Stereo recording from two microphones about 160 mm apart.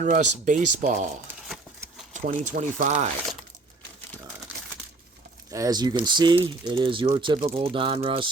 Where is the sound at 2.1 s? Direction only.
50° right (ahead or behind).